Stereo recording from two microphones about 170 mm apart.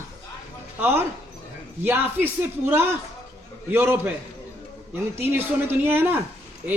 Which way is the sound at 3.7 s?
10° right (ahead or behind).